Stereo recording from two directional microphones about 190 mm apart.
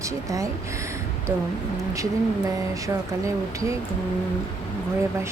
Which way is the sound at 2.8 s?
15° right (ahead or behind).